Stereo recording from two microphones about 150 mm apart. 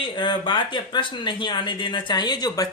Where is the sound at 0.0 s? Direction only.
30° left (ahead or behind).